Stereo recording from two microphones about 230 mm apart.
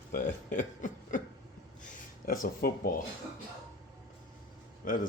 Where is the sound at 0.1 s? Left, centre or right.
Left.